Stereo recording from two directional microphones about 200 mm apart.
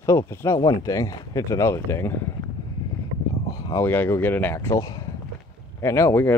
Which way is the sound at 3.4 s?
20° left (ahead or behind).